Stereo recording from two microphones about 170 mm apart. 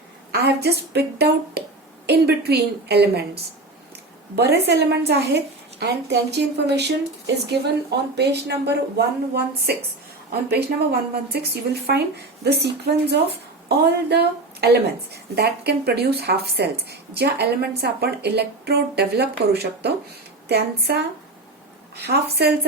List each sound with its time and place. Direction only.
0.3 s speech: 70° right (ahead or behind)